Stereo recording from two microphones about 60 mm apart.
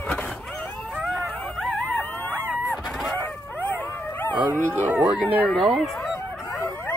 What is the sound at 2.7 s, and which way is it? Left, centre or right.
Fowl, centre.